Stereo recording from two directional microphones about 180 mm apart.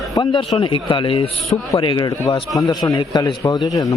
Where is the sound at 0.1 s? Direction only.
25° left (ahead or behind).